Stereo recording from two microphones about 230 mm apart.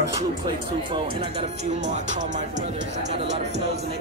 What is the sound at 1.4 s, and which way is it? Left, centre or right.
Speech, right.